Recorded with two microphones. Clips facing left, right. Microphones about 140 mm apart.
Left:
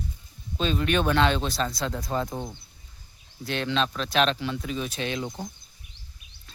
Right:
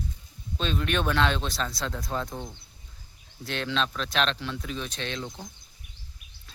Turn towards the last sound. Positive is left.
turn(degrees=5)  # may be behind; listen again after turning